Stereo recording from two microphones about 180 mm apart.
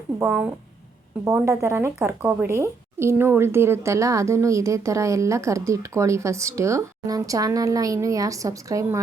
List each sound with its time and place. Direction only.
0.2 s speech: 10° right (ahead or behind)